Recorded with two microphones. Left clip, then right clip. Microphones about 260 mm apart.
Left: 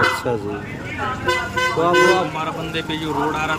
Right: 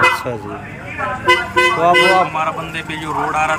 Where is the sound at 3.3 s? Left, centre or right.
Centre.